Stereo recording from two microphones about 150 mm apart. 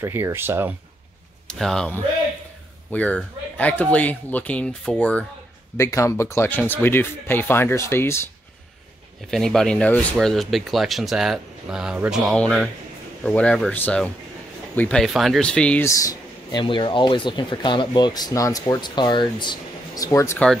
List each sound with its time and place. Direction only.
0.0 s speech: 15° right (ahead or behind)
1.5 s speech: 5° left (ahead or behind)
5.8 s speech: 20° left (ahead or behind)
9.3 s speech: 5° left (ahead or behind)
12.3 s speech: 5° left (ahead or behind)
15.9 s a sound: 25° left (ahead or behind)
16.6 s speech: 35° left (ahead or behind)